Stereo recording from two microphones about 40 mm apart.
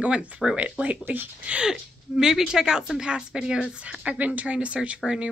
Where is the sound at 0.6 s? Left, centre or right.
Right.